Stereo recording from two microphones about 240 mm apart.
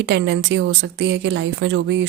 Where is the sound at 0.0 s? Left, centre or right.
Right.